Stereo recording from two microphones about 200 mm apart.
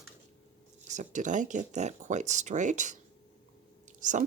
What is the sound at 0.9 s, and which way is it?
Speech, 40° right (ahead or behind).